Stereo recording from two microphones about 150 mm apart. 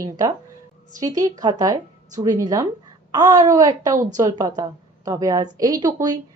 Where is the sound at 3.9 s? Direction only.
60° right (ahead or behind).